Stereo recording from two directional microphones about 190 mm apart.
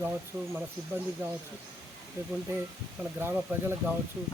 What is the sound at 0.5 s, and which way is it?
A man's voice, 10° right (ahead or behind).